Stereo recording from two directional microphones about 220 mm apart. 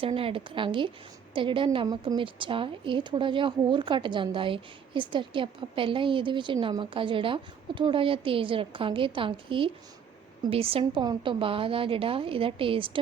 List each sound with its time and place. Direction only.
0.0 s a woman's voice: 25° right (ahead or behind)